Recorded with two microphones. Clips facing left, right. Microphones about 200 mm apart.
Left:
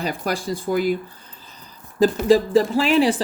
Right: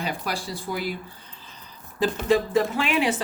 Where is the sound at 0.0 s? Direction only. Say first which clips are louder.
Left 5 dB; 45° left (ahead or behind).